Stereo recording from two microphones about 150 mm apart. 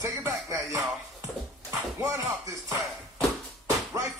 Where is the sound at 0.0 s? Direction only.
20° right (ahead or behind).